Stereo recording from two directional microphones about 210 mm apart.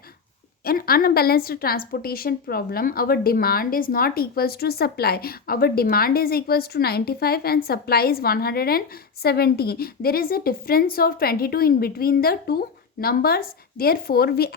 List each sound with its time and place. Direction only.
0.6 s a woman's voice: 45° left (ahead or behind)